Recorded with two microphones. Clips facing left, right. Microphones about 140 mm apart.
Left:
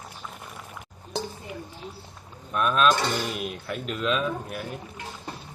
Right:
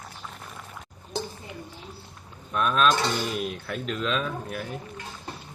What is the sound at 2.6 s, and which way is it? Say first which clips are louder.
Speech: left 1 dB; 5° left (ahead or behind).